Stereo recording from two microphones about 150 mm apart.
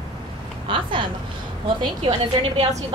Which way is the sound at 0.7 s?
35° right (ahead or behind).